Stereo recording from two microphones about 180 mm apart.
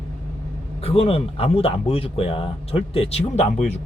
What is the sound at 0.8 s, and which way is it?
Speech, 35° left (ahead or behind).